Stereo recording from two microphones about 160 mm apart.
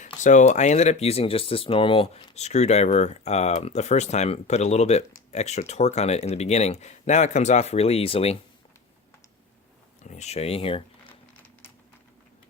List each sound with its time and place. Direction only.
0.0 s speech: 50° left (ahead or behind)
10.0 s speech: 45° left (ahead or behind)